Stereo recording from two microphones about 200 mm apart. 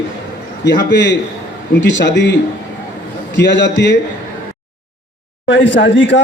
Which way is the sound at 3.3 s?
60° left (ahead or behind).